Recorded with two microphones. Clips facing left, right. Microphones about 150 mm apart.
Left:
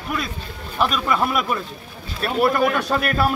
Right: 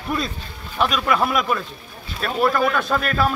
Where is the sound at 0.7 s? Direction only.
Centre (ahead or behind).